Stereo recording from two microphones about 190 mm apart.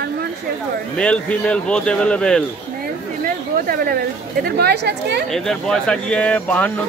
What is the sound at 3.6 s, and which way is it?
A woman's voice, 50° right (ahead or behind).